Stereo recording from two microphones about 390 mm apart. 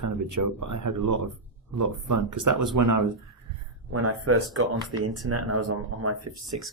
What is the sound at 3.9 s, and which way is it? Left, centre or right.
Speech, right.